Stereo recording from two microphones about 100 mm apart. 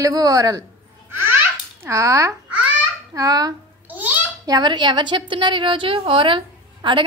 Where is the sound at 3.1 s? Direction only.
35° right (ahead or behind).